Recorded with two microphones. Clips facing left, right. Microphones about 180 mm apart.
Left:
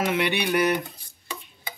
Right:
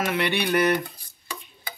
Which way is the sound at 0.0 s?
15° left (ahead or behind).